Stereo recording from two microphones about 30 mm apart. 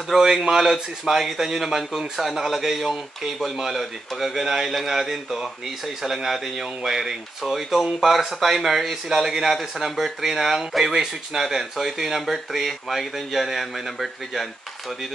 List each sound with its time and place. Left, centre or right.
0.1 s speech: centre
11.3 s speech: right
11.7 s speech: centre